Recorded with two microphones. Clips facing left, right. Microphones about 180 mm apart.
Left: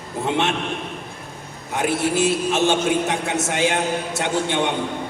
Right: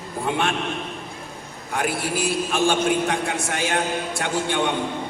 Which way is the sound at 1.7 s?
20° left (ahead or behind).